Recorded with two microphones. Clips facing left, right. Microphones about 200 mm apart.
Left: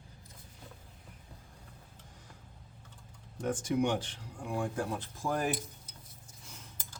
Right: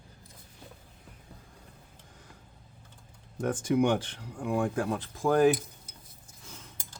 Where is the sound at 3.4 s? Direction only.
90° right.